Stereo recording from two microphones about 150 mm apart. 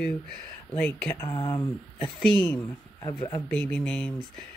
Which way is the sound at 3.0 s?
20° left (ahead or behind).